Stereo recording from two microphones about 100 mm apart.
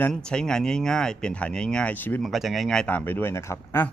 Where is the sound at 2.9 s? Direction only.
15° left (ahead or behind).